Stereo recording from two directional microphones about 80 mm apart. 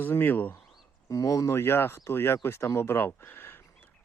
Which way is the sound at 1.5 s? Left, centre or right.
Left.